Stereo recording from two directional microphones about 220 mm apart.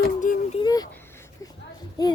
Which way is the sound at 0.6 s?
15° left (ahead or behind).